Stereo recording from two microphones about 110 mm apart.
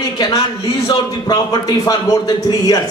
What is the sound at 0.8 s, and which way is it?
A man's voice, 40° left (ahead or behind).